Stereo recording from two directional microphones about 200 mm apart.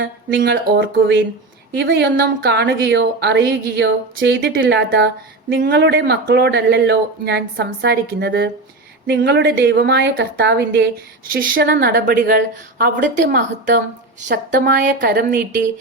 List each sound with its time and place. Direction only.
0.0 s a woman's voice: 65° right (ahead or behind)
11.3 s speech: 45° right (ahead or behind)